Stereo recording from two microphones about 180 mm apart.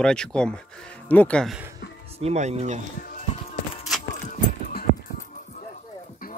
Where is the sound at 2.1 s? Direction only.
35° right (ahead or behind).